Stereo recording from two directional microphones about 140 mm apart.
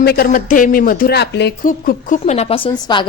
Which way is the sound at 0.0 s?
90° left.